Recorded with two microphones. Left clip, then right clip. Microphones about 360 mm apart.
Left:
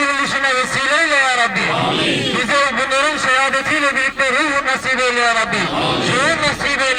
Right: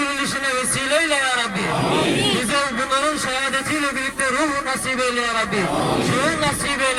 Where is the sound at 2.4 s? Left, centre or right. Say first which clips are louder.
Left 6 dB; centre.